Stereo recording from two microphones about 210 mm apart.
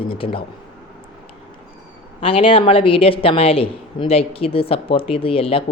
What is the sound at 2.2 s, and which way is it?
Speech, 25° left (ahead or behind).